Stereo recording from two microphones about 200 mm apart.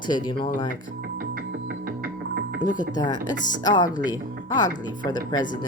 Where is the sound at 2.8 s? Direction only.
20° left (ahead or behind).